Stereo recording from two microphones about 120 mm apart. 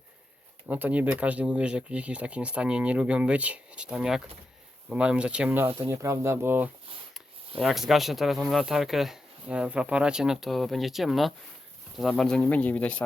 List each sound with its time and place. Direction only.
0.7 s speech: 15° right (ahead or behind)
7.6 s speech: centre (ahead or behind)